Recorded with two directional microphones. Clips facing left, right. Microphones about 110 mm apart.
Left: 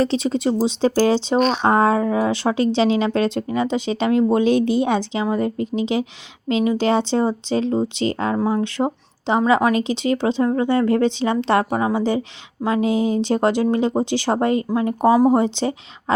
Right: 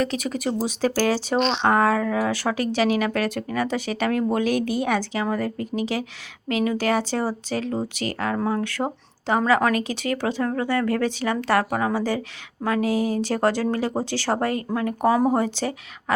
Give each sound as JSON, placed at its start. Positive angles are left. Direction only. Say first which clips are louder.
{"t": 0.0, "sound": "a woman's voice", "louder": "left 5 dB", "side_deg": 25}